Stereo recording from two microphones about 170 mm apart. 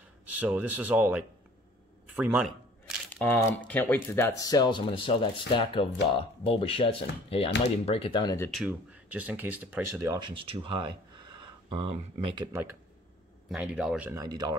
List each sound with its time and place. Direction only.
0.2 s a man's voice: 10° right (ahead or behind)
3.1 s speech: 10° left (ahead or behind); by 8.4 s 25° left (ahead or behind)
8.5 s speech: 5° right (ahead or behind)
10.2 s speech: 30° right (ahead or behind)
13.5 s speech: 5° right (ahead or behind)
14.1 s speech: 20° right (ahead or behind)